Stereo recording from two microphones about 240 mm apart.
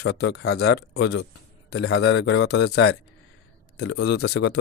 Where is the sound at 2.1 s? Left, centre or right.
Left.